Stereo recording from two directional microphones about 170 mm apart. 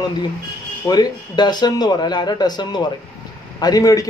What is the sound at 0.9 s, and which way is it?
Speech, 25° left (ahead or behind).